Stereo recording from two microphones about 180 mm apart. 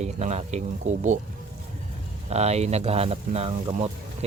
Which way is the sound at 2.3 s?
35° right (ahead or behind).